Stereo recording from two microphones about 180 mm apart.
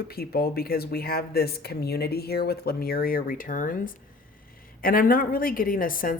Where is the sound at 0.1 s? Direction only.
60° left (ahead or behind).